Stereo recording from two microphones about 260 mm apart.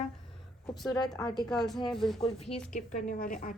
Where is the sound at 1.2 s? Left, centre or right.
Centre.